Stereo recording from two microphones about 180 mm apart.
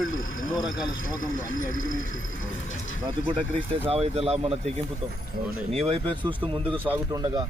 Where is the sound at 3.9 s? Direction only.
35° right (ahead or behind).